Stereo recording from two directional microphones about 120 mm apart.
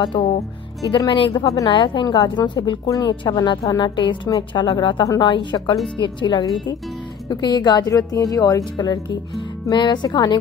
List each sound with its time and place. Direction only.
0.0 s a woman's voice: 40° left (ahead or behind)
1.4 s a woman's voice: 30° left (ahead or behind)